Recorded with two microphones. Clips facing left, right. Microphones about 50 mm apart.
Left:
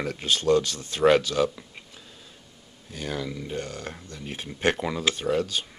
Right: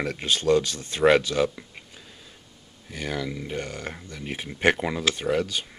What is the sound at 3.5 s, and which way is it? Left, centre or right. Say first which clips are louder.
Speech: right 1 dB; right.